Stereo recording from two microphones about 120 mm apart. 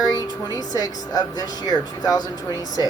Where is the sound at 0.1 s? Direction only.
30° left (ahead or behind).